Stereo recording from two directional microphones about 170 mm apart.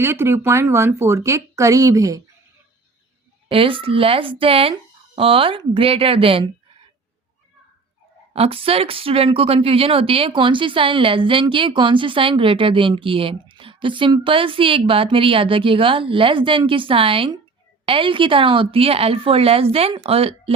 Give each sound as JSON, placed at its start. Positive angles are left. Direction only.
{"t": 0.0, "sound": "speech", "side_deg": -15}
{"t": 3.5, "sound": "speech", "side_deg": -30}
{"t": 8.3, "sound": "speech", "side_deg": -35}